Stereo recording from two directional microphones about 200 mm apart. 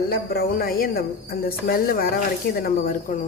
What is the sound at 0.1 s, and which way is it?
Speech, 50° left (ahead or behind).